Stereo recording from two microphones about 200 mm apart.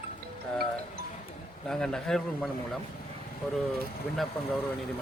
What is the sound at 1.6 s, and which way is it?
Speech, 5° left (ahead or behind).